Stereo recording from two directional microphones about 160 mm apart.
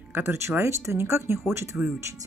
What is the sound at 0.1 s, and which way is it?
Speech, 15° right (ahead or behind).